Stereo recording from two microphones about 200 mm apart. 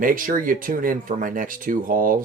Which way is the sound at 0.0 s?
45° right (ahead or behind).